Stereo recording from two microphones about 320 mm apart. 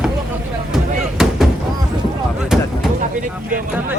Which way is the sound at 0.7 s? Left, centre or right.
Centre.